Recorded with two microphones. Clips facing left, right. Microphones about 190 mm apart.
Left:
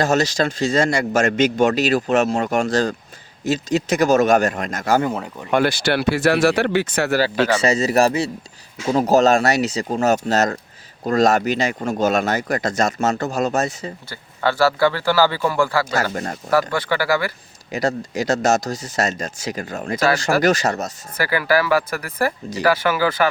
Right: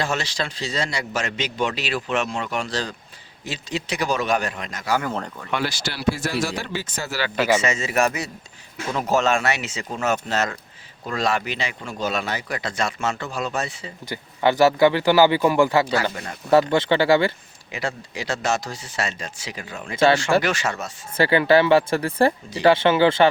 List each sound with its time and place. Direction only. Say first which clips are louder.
0.0 s speech: left 8 dB; 40° left (ahead or behind); by 7.2 s 65° left (ahead or behind)
7.6 s speech: left 5 dB; 35° left (ahead or behind)
14.1 s speech: right 3 dB; 15° right (ahead or behind)
16.1 s speech: left 7 dB; 50° left (ahead or behind)
16.5 s speech: right 3 dB; 25° right (ahead or behind)
17.7 s speech: left 7 dB; 40° left (ahead or behind)
21.2 s speech: right 3 dB; 25° right (ahead or behind)